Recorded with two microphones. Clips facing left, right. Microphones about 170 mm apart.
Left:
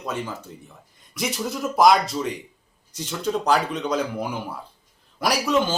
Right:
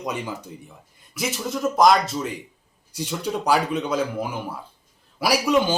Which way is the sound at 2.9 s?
10° right (ahead or behind).